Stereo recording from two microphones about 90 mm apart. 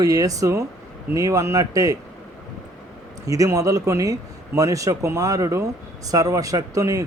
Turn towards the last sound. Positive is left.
turn(degrees=-40)  # may be behind; listen again after turning